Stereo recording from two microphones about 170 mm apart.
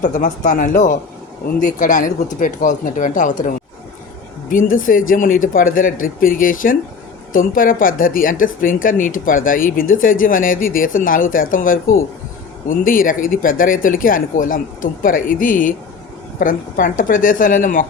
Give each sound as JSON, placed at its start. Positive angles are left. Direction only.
{"t": 0.0, "sound": "speech", "side_deg": 50}